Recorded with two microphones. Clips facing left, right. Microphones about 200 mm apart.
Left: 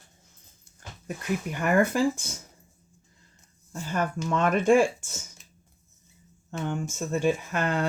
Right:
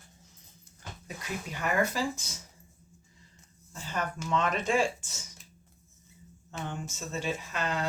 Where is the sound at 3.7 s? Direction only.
55° left (ahead or behind).